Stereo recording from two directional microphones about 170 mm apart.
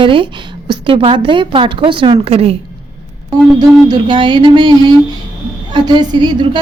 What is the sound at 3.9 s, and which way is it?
Speech, 25° right (ahead or behind).